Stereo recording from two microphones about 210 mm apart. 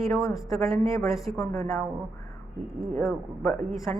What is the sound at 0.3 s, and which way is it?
Speech, centre (ahead or behind).